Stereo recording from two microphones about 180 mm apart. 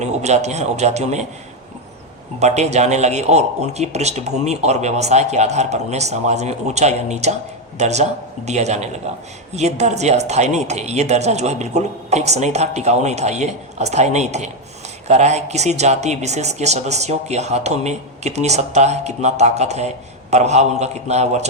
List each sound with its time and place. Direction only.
0.0 s speech: 40° right (ahead or behind)
2.4 s speech: 40° right (ahead or behind)